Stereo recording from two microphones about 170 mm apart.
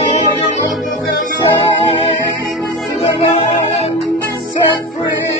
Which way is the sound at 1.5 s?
30° left (ahead or behind).